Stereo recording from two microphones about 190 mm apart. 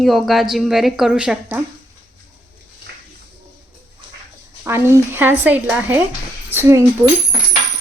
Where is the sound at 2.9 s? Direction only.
60° right (ahead or behind).